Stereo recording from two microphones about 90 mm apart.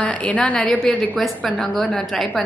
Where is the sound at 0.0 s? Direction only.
15° left (ahead or behind).